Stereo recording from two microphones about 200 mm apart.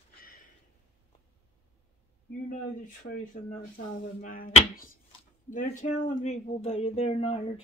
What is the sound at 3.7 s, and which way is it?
Speech, 45° left (ahead or behind).